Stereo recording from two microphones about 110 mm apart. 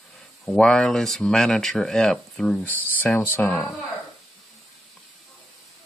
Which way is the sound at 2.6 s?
15° left (ahead or behind).